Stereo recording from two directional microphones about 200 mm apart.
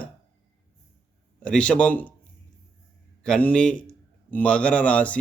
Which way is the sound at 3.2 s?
5° left (ahead or behind).